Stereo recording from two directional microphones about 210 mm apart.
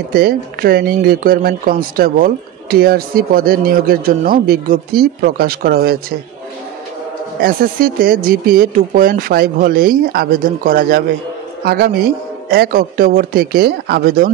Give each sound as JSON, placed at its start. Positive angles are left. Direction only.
{"t": 0.1, "sound": "speech", "side_deg": -45}
{"t": 7.4, "sound": "speech", "side_deg": -45}